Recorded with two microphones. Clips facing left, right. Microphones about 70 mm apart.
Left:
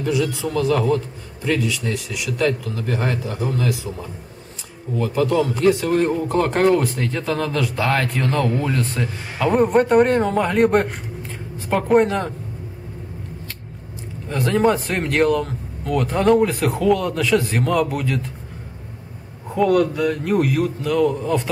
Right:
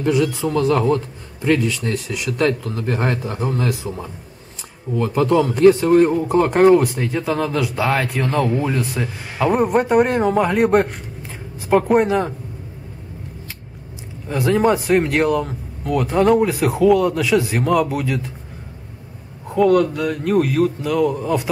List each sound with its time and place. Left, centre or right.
0.1 s speech: right
4.9 s speech: right
5.9 s a man's voice: centre
14.3 s speech: centre
19.5 s speech: centre